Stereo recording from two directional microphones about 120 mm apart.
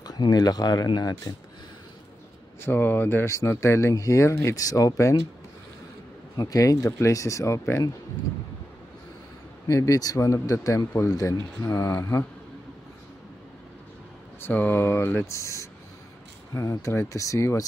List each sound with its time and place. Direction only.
0.0 s speech: 35° left (ahead or behind)
2.6 s speech: 15° left (ahead or behind)
6.3 s speech: 30° left (ahead or behind)
9.7 s speech: 25° left (ahead or behind)
14.4 s speech: 15° left (ahead or behind)